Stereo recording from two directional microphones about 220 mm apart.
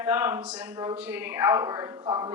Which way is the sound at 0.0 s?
10° right (ahead or behind).